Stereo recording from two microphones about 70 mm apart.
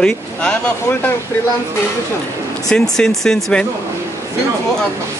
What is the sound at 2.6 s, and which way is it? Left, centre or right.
Speech, centre.